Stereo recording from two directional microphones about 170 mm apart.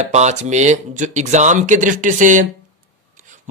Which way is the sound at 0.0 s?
40° right (ahead or behind).